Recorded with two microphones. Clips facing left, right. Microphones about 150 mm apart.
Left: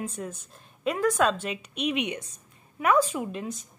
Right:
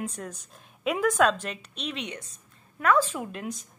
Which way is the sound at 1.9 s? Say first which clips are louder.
Left 6 dB; 20° left (ahead or behind).